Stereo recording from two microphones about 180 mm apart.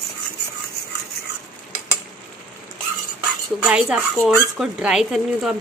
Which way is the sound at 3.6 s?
5° right (ahead or behind).